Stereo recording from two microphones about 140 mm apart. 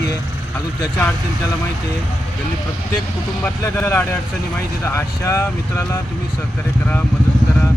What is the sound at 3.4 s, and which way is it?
Speech, 15° left (ahead or behind).